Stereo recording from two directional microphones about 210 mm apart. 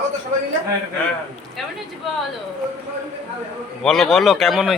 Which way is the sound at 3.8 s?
Centre (ahead or behind).